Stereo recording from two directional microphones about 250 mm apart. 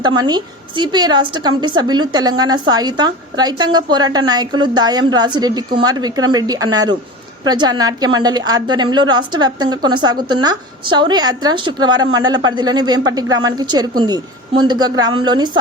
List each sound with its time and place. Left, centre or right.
0.0 s a woman's voice: centre